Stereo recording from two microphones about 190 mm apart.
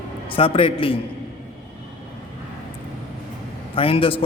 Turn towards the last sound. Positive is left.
turn(degrees=30)  # may be behind; listen again after turning